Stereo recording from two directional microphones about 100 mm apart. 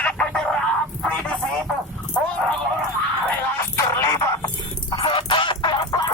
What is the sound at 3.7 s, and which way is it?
Music, 30° left (ahead or behind).